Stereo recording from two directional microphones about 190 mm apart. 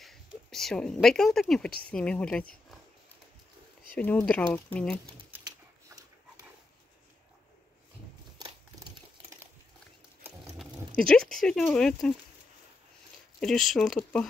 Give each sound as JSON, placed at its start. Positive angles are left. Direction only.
{"t": 0.0, "sound": "a woman's voice", "side_deg": 0}
{"t": 3.9, "sound": "speech", "side_deg": 10}
{"t": 4.9, "sound": "dog", "side_deg": -15}
{"t": 8.4, "sound": "crushing", "side_deg": -20}
{"t": 11.0, "sound": "speech", "side_deg": 5}
{"t": 13.4, "sound": "speech", "side_deg": 0}